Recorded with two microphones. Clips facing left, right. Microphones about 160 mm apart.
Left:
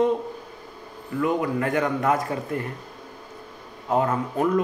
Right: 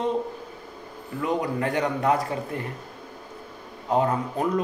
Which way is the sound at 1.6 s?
30° right (ahead or behind).